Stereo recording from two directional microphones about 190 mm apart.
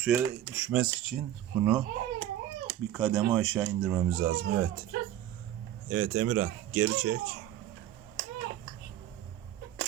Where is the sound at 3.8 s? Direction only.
15° right (ahead or behind).